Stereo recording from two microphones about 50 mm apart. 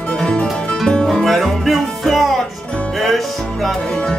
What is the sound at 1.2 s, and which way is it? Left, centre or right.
Music, centre.